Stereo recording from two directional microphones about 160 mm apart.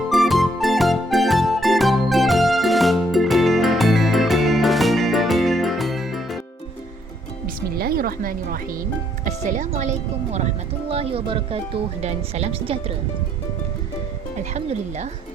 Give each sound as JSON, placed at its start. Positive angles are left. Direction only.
{"t": 0.1, "sound": "music", "side_deg": 0}
{"t": 7.4, "sound": "music", "side_deg": -70}
{"t": 9.5, "sound": "speech", "side_deg": -50}
{"t": 14.5, "sound": "speech", "side_deg": -45}